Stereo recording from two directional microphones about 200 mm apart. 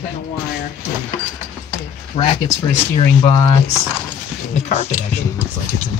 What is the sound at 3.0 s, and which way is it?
Speech, 25° left (ahead or behind).